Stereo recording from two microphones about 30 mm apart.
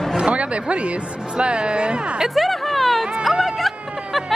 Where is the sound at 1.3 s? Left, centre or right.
Right.